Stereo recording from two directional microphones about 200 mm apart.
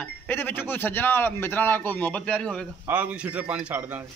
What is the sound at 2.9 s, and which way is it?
A man's voice, 10° right (ahead or behind).